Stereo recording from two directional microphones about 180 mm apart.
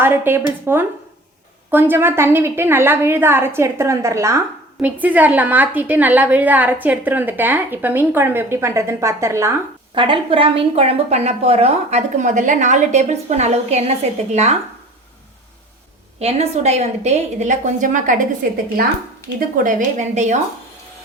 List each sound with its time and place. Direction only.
0.0 s a woman's voice: 10° right (ahead or behind)
9.9 s a woman's voice: 30° right (ahead or behind)
16.2 s a woman's voice: 35° right (ahead or behind)
19.4 s a woman's voice: 50° right (ahead or behind)